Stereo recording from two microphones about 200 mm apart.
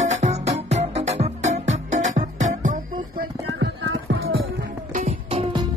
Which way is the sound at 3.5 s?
75° right (ahead or behind).